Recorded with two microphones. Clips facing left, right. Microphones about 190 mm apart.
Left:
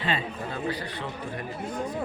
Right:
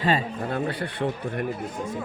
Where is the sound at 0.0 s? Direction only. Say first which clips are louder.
Right 5 dB; 50° right (ahead or behind).